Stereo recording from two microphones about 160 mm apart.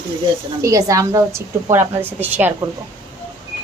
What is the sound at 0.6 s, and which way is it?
A woman's voice, 20° right (ahead or behind).